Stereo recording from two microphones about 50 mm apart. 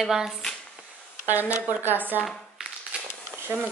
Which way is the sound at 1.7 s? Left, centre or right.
Right.